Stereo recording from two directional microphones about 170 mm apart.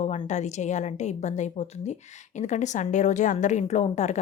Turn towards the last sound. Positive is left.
turn(degrees=40)  # may be behind; listen again after turning